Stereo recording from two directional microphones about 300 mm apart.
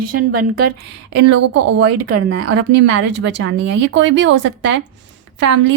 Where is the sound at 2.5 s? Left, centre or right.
Right.